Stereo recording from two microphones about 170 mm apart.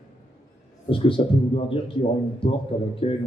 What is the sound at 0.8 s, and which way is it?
A man's voice, 30° left (ahead or behind).